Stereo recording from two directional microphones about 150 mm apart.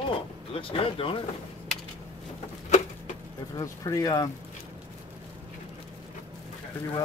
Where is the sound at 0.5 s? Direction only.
35° left (ahead or behind).